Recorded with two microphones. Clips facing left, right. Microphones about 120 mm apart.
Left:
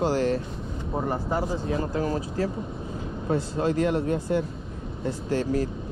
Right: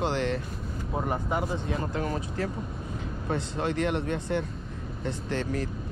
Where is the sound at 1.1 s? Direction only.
Centre (ahead or behind).